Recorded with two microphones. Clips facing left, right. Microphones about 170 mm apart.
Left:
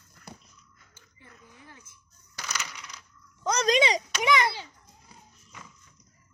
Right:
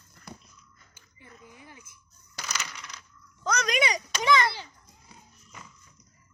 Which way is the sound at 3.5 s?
25° left (ahead or behind).